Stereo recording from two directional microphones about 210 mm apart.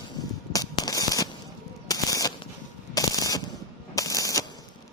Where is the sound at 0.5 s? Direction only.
15° left (ahead or behind).